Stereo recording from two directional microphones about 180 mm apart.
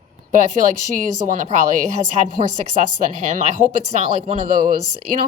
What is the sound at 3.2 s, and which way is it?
Speech, 40° right (ahead or behind).